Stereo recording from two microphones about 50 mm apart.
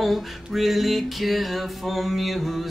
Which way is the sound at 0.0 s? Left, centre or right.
Centre.